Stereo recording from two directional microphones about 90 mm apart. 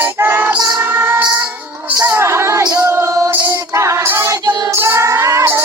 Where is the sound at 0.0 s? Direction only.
25° right (ahead or behind).